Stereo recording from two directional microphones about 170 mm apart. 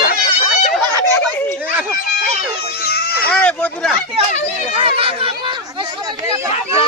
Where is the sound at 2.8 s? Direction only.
70° left (ahead or behind).